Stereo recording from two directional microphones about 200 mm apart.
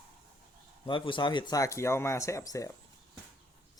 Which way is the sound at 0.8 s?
25° left (ahead or behind).